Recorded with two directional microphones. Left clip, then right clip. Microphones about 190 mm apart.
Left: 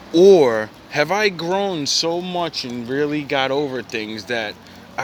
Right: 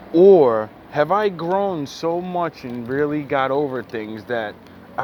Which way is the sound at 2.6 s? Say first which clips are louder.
Even; 20° left (ahead or behind).